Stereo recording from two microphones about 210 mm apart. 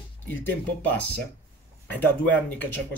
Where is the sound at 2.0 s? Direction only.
5° left (ahead or behind).